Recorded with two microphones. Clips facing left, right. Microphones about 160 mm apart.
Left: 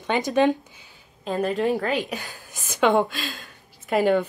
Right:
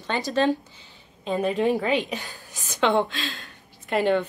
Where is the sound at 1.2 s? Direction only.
Centre (ahead or behind).